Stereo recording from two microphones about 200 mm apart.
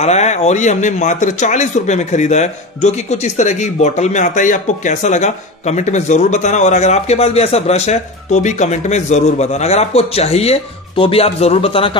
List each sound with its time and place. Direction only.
0.0 s a man's voice: 35° left (ahead or behind)